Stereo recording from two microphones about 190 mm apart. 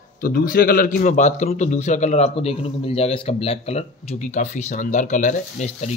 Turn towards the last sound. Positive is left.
turn(degrees=40)  # may be behind; listen again after turning